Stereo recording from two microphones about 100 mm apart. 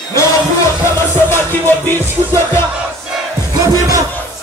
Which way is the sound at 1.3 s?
20° left (ahead or behind).